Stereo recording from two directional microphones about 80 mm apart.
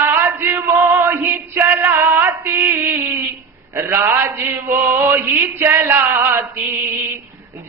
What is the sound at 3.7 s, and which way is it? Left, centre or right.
A man's voice, right.